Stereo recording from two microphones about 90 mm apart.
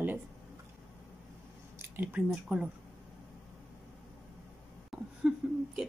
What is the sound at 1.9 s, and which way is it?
Speech, 20° right (ahead or behind).